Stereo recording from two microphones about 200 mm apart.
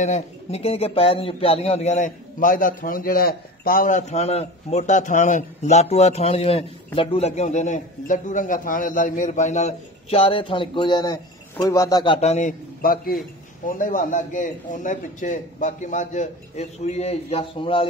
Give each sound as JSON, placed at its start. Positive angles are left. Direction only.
{"t": 0.0, "sound": "speech", "side_deg": 35}